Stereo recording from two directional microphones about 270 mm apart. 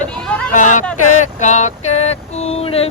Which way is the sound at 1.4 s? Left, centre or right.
Left.